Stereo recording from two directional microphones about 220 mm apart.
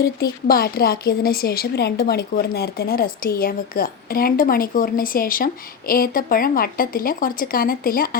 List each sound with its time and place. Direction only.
0.0 s a woman's voice: 45° left (ahead or behind)